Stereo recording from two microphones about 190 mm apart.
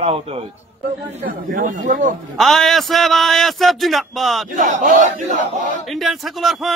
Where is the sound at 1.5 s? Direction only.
45° right (ahead or behind).